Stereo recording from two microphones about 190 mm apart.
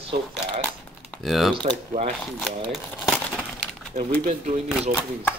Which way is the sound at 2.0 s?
40° right (ahead or behind).